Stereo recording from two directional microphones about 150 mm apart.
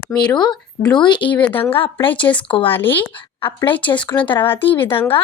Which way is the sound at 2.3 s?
20° left (ahead or behind).